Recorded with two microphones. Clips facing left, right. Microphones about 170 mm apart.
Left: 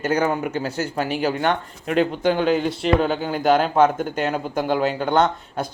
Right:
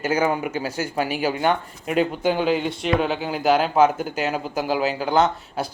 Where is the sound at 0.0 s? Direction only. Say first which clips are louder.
Left 1 dB; 10° right (ahead or behind).